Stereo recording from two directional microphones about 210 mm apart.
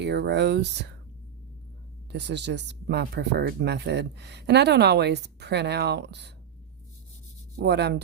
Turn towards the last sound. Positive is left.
turn(degrees=-55)  # may be behind; listen again after turning